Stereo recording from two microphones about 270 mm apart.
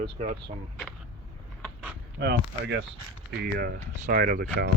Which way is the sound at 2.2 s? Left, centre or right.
Right.